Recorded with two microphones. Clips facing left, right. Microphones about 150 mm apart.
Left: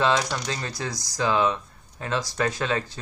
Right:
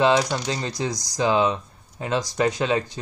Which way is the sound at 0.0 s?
20° right (ahead or behind).